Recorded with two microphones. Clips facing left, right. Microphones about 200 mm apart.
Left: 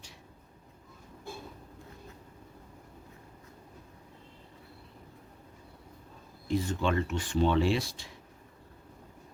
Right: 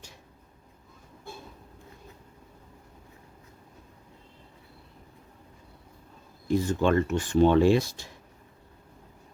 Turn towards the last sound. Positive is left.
turn(degrees=-45)  # may be behind; listen again after turning